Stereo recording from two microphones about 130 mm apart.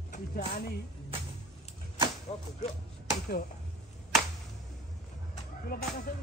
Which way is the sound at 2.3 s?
50° left (ahead or behind).